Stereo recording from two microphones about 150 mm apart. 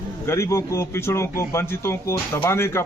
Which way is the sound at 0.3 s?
20° left (ahead or behind).